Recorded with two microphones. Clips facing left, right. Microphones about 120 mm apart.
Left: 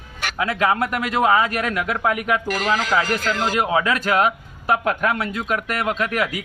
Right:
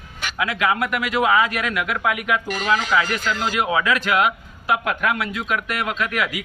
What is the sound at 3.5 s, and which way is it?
A man's voice, 40° left (ahead or behind).